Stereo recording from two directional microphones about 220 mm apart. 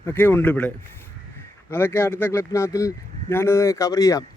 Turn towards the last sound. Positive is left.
turn(degrees=15)  # may be behind; listen again after turning